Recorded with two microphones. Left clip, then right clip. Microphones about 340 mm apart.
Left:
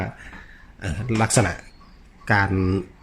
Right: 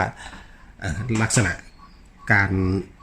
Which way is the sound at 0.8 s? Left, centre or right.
Centre.